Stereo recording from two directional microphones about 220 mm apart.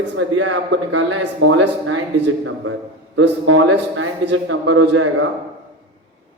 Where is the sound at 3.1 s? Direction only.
65° right (ahead or behind).